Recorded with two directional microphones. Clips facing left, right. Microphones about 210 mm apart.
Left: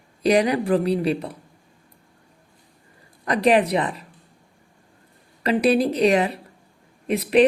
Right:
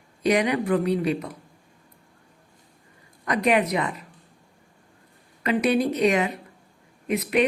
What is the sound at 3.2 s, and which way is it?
Speech, 30° left (ahead or behind).